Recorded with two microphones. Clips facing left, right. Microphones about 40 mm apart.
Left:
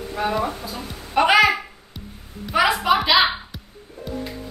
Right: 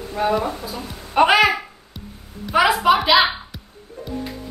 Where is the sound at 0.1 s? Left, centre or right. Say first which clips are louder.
Right 3 dB; centre.